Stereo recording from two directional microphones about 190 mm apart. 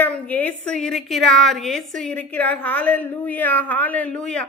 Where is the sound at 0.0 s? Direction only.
10° left (ahead or behind).